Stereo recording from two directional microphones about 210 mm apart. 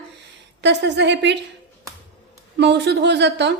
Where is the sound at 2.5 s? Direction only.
55° right (ahead or behind).